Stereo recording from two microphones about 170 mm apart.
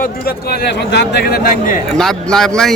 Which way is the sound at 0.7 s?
80° left.